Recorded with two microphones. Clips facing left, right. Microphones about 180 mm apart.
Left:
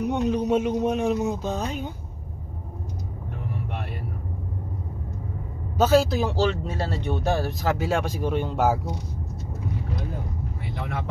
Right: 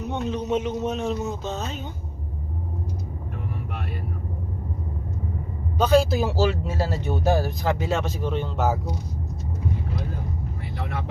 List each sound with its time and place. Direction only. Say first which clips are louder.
0.0 s speech: left 4 dB; 10° left (ahead or behind)
5.8 s speech: even; 5° left (ahead or behind)